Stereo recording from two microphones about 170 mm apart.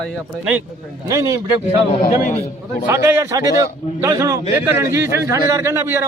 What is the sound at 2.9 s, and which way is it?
Speech, 15° right (ahead or behind).